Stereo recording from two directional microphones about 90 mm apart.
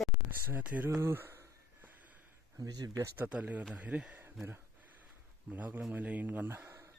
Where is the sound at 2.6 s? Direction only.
45° right (ahead or behind).